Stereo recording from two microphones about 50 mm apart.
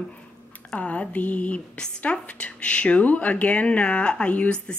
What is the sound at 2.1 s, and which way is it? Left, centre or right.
A woman's voice, centre.